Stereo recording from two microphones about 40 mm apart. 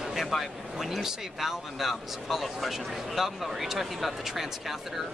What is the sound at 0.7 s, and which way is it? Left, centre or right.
Speech, centre.